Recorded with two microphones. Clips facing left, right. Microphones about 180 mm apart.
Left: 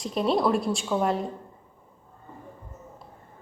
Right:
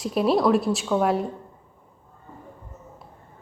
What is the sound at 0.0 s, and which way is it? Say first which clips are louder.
A woman's voice: right 3 dB; 5° right (ahead or behind).